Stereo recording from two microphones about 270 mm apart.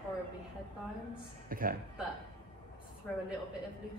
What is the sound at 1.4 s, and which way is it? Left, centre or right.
Speech, right.